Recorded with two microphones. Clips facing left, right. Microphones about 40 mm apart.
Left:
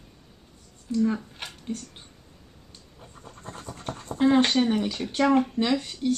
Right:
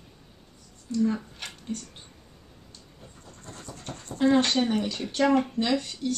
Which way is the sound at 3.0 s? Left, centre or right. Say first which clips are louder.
Left 5 dB; left.